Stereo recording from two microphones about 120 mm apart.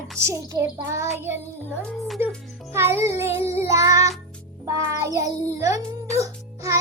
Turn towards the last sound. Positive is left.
turn(degrees=-25)  # may be behind; listen again after turning